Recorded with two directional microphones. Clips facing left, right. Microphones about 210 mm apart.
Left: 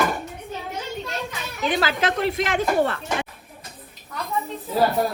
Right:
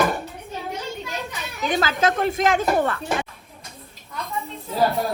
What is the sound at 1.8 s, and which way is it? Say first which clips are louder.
Speech: right 3 dB; 45° right (ahead or behind).